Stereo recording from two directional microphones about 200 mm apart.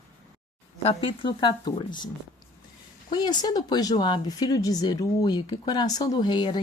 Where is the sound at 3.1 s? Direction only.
20° left (ahead or behind).